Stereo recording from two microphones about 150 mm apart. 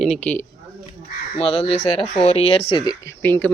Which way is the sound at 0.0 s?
5° left (ahead or behind).